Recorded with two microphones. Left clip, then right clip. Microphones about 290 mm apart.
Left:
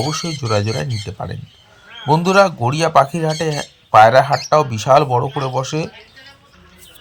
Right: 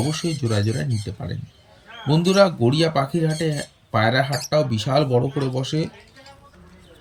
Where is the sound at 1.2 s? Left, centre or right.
Centre.